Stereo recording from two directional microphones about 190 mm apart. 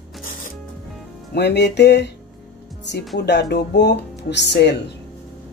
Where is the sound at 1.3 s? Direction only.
60° left (ahead or behind).